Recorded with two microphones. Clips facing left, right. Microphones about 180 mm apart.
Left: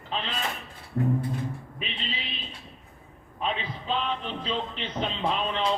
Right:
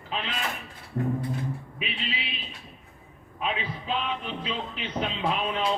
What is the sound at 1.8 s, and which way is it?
Music, 5° right (ahead or behind).